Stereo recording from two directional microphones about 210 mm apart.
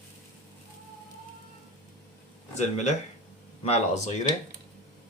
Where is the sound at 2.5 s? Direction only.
35° left (ahead or behind).